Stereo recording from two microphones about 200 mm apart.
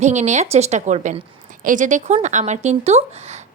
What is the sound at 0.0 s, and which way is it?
Speech, 35° right (ahead or behind).